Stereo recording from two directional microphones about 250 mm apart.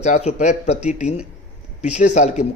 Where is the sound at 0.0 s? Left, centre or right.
Left.